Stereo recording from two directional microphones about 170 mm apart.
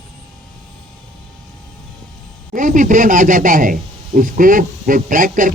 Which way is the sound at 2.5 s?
50° right (ahead or behind).